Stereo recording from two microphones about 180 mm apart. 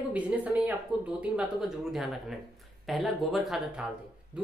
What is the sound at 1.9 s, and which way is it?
A woman's voice, centre (ahead or behind).